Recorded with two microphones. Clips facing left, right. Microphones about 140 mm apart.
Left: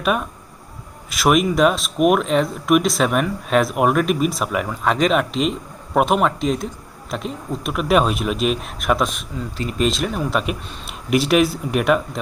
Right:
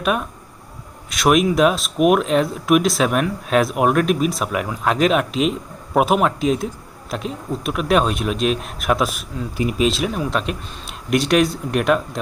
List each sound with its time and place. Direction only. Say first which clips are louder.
0.0 s speech: even; centre (ahead or behind)